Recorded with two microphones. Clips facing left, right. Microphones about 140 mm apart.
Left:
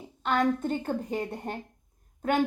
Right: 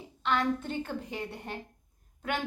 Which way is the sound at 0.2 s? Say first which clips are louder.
Left 3 dB; 45° left (ahead or behind).